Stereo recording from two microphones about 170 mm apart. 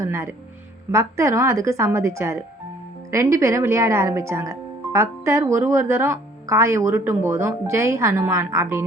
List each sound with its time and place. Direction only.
0.0 s speech: 15° right (ahead or behind)